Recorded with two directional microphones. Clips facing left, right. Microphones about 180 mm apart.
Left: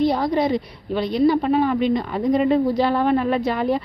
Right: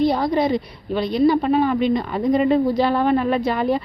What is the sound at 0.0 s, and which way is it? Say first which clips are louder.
A woman's voice: right 1 dB; 30° right (ahead or behind).